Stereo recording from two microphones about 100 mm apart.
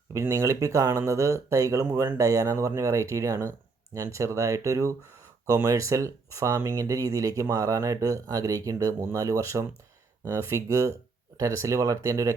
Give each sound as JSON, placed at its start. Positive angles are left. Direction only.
{"t": 0.1, "sound": "speech", "side_deg": -30}